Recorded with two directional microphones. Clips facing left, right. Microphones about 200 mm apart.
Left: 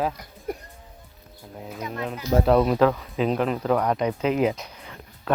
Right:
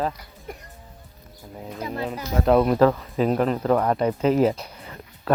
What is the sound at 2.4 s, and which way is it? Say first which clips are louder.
Speech: right 3 dB; centre (ahead or behind).